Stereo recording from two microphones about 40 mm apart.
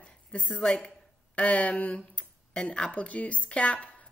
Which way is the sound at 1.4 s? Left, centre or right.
Left.